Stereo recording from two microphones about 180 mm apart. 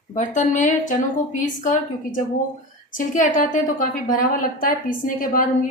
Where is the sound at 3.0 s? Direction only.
45° left (ahead or behind).